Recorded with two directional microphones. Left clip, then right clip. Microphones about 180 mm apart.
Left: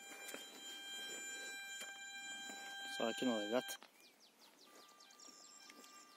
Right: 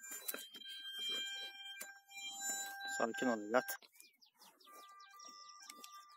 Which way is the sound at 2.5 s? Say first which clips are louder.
Right 4 dB; 30° right (ahead or behind).